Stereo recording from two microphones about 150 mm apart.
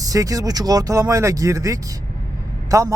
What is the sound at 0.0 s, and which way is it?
Speech, 25° right (ahead or behind).